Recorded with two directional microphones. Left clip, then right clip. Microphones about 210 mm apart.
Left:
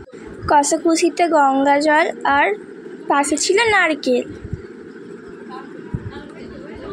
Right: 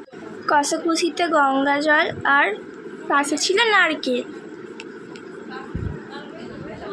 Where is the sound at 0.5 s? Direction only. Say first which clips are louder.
Left 4 dB; 20° left (ahead or behind).